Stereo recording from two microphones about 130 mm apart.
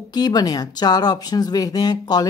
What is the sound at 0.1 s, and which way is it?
Speech, 30° left (ahead or behind).